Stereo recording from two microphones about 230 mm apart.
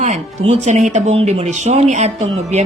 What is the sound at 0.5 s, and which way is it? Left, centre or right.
A woman's voice, right.